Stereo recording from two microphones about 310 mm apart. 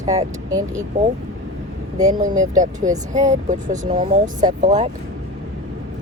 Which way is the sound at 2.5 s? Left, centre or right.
Right.